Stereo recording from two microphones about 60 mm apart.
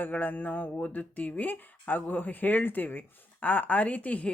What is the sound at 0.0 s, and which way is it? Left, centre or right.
Speech, left.